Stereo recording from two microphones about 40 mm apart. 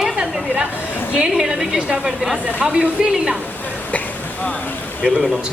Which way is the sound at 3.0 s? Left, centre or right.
Centre.